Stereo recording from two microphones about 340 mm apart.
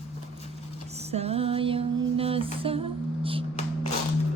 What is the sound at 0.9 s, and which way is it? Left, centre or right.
Music, centre.